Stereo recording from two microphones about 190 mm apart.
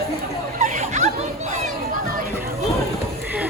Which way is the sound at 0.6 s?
40° right (ahead or behind).